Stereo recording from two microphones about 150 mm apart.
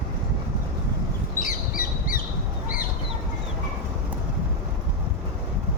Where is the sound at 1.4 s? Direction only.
65° left (ahead or behind).